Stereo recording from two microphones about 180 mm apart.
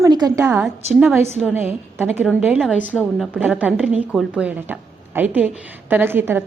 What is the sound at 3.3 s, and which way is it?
A woman's voice, 5° right (ahead or behind).